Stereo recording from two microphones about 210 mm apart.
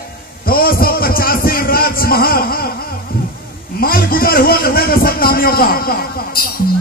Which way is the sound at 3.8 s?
45° left (ahead or behind).